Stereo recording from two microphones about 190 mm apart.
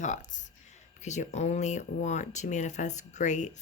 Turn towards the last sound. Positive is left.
turn(degrees=40)  # may be behind; listen again after turning